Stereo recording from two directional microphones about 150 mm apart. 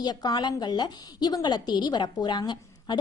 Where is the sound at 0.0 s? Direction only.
30° left (ahead or behind).